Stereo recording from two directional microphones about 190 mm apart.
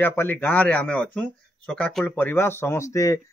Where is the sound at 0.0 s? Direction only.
10° left (ahead or behind).